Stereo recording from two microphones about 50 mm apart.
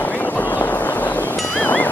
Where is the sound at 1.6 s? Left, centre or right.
Left.